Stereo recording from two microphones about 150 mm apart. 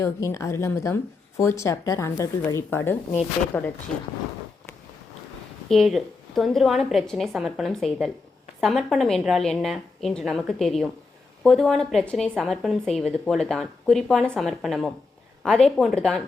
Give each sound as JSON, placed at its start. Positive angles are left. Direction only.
{"t": 0.0, "sound": "speech", "side_deg": 20}
{"t": 5.6, "sound": "a woman's voice", "side_deg": 0}